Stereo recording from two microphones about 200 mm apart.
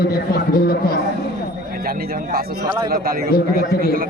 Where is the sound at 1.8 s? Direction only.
50° right (ahead or behind).